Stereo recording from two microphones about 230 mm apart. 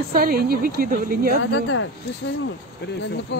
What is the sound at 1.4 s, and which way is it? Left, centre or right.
Speech, left.